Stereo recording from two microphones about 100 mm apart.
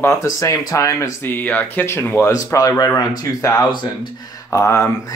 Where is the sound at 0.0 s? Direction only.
30° left (ahead or behind).